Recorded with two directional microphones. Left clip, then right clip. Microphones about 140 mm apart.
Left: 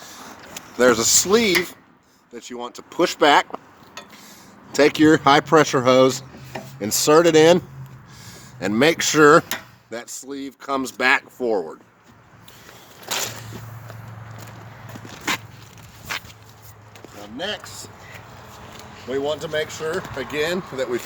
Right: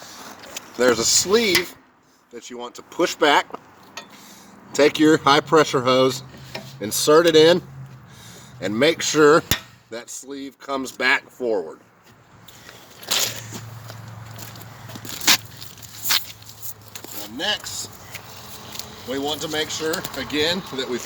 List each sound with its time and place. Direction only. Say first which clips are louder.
0.8 s speech: left 2 dB; 70° left (ahead or behind); by 3.6 s 50° left (ahead or behind)
4.7 s speech: left 1 dB; 40° left (ahead or behind)
8.3 s speech: left 2 dB; 50° left (ahead or behind)
13.1 s a sound: right 4 dB; centre (ahead or behind)
15.3 s dog: right 7 dB; 70° right (ahead or behind)
16.1 s a sound: right 7 dB; 90° right
17.3 s speech: right 4 dB; 30° left (ahead or behind)
18.8 s a sound: right 5 dB; 20° right (ahead or behind)
19.1 s speech: left 2 dB; 40° left (ahead or behind)
20.3 s speech: right 2 dB; 60° left (ahead or behind)